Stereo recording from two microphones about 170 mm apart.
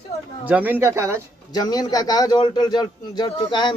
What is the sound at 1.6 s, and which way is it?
Speech, 25° left (ahead or behind).